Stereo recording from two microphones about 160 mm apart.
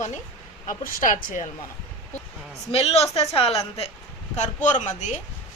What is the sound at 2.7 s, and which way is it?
A woman's voice, 40° left (ahead or behind).